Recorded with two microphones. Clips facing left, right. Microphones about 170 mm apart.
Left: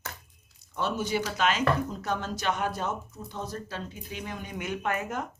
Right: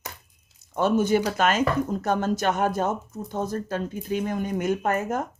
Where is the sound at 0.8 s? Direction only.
50° right (ahead or behind).